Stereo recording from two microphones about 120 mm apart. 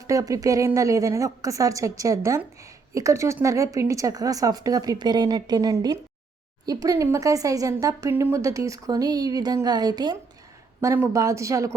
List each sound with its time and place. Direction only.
0.1 s a woman's voice: 30° right (ahead or behind)
10.8 s a woman's voice: 20° right (ahead or behind)